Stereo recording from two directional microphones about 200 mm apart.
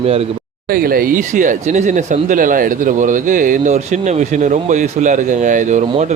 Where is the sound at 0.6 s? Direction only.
45° right (ahead or behind).